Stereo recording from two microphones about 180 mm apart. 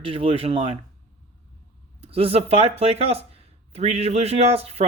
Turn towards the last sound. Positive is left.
turn(degrees=-35)  # may be behind; listen again after turning